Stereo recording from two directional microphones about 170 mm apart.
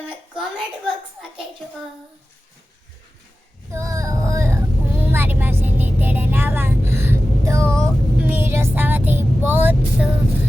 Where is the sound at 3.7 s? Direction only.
20° right (ahead or behind).